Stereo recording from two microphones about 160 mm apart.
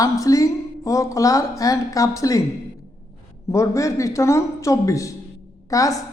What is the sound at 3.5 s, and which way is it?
A woman's voice, 20° left (ahead or behind).